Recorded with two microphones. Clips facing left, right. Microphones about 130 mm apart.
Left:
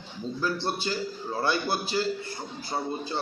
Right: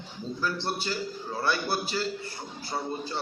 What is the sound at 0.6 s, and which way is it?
A man's voice, 20° left (ahead or behind).